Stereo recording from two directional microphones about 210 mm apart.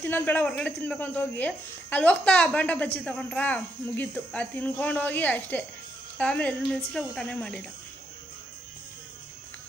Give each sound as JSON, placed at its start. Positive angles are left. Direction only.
{"t": 0.0, "sound": "a woman's voice", "side_deg": 10}